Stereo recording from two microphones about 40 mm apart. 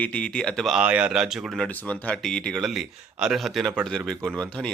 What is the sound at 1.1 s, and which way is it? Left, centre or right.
Speech, centre.